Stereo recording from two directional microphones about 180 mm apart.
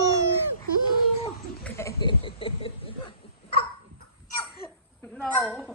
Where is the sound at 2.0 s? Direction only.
30° left (ahead or behind).